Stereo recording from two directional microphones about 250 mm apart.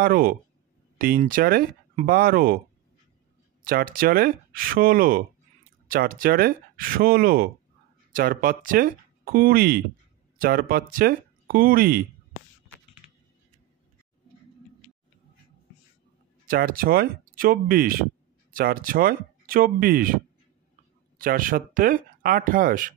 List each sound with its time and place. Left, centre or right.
0.0 s speech: right
3.6 s speech: right
16.4 s speech: right
21.2 s speech: right